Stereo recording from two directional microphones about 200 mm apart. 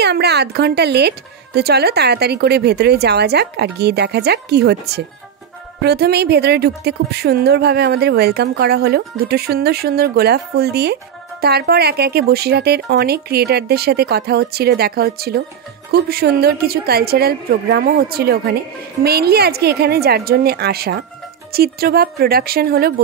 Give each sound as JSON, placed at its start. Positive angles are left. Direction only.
{"t": 0.0, "sound": "a woman's voice", "side_deg": -55}